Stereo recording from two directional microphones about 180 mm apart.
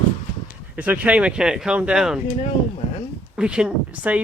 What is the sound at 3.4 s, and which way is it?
Speech, 5° right (ahead or behind).